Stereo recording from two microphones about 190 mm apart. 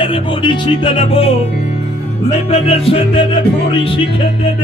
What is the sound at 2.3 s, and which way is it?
Music, 35° left (ahead or behind).